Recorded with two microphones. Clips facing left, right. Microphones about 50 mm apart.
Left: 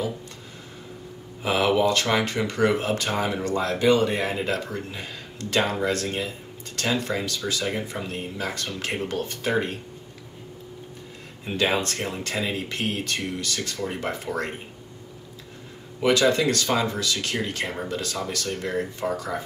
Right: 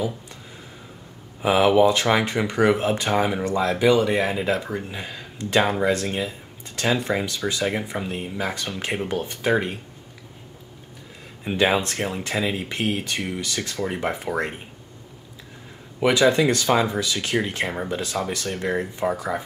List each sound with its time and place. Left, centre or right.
1.4 s speech: centre
11.4 s speech: centre
16.0 s speech: right